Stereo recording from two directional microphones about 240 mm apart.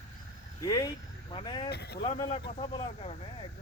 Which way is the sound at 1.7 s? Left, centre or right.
Left.